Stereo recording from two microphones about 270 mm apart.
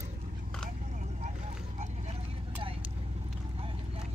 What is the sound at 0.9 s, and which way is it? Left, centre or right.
Vehicle, right.